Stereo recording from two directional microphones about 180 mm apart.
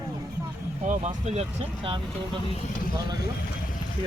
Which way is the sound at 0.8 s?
40° right (ahead or behind).